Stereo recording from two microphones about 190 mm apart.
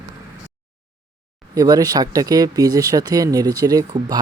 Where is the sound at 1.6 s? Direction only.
20° right (ahead or behind).